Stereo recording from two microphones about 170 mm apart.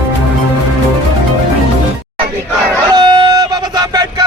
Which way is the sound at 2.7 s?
25° right (ahead or behind).